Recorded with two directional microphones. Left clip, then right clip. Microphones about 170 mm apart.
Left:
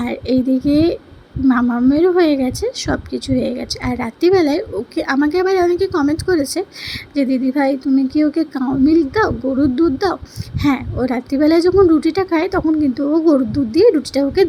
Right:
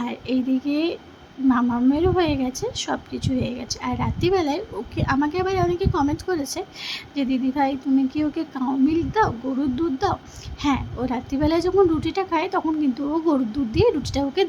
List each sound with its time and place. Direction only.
0.0 s speech: 20° left (ahead or behind)